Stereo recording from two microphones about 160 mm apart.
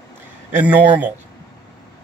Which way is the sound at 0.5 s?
10° right (ahead or behind).